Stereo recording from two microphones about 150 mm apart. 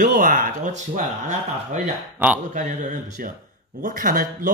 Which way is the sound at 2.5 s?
60° right (ahead or behind).